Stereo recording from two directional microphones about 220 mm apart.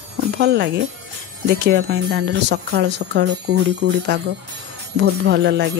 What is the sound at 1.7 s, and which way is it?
Speech, 45° right (ahead or behind).